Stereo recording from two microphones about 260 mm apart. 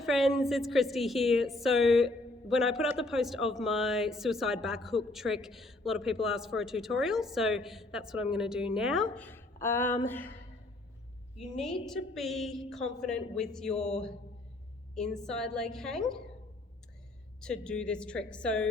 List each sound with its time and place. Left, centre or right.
0.0 s a woman's voice: centre
11.5 s a woman's voice: centre
13.7 s speech: left
14.9 s a woman's voice: centre
17.4 s a woman's voice: centre